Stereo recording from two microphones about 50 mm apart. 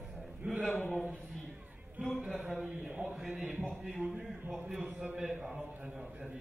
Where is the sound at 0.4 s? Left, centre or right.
Right.